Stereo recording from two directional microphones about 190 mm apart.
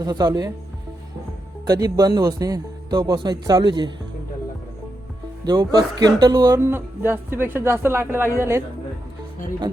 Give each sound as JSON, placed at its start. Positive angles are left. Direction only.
{"t": 0.0, "sound": "speech", "side_deg": -20}
{"t": 1.6, "sound": "speech", "side_deg": -20}
{"t": 5.5, "sound": "speech", "side_deg": -20}